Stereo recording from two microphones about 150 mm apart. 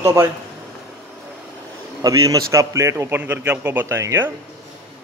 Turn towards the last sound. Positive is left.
turn(degrees=-20)  # may be behind; listen again after turning